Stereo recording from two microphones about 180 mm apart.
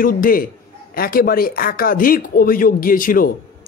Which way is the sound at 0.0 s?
50° left (ahead or behind).